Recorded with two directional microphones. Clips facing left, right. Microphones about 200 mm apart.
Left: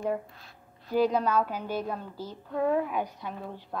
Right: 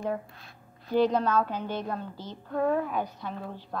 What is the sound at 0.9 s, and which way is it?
A woman's voice, 10° left (ahead or behind).